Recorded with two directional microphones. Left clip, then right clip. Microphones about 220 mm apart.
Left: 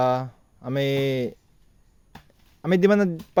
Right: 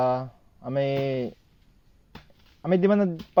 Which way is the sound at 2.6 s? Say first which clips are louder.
Left 3 dB; 40° left (ahead or behind).